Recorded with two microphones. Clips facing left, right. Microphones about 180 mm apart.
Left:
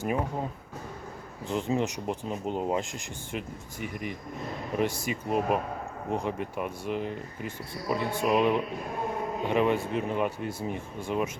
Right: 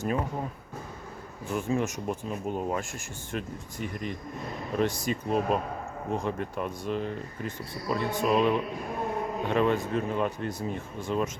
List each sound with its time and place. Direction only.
0.0 s speech: 15° left (ahead or behind)
1.5 s speech: 20° left (ahead or behind)